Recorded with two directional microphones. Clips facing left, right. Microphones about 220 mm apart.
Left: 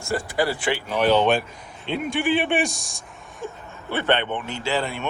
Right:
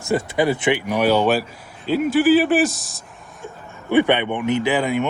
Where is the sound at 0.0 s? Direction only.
20° right (ahead or behind); by 3.0 s centre (ahead or behind).